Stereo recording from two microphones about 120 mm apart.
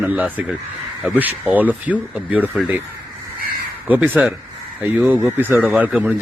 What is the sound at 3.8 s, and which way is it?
Speech, 15° right (ahead or behind).